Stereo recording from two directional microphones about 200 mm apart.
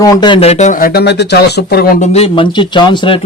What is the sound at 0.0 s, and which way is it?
Speech, 20° left (ahead or behind).